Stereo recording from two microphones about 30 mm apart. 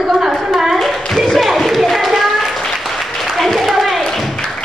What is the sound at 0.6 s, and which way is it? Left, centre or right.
Clapping, centre.